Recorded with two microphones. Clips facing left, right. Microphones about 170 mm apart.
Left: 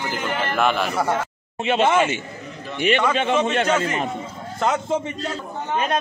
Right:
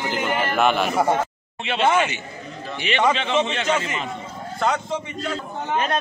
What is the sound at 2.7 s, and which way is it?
Speech, 50° left (ahead or behind).